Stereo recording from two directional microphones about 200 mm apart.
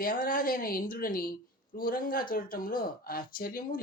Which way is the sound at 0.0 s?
45° left (ahead or behind).